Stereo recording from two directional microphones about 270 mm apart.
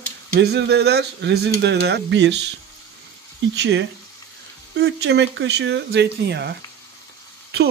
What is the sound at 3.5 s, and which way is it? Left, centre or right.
A woman's voice, right.